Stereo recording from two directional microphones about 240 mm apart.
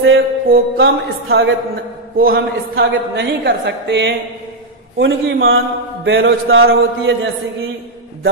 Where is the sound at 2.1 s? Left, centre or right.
Right.